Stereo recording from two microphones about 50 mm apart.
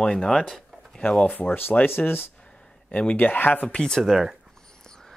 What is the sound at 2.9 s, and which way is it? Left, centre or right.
Speech, left.